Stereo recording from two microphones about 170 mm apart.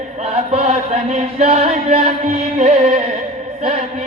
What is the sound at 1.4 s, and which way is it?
Music, 40° right (ahead or behind).